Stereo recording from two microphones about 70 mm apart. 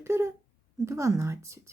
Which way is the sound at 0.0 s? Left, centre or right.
Right.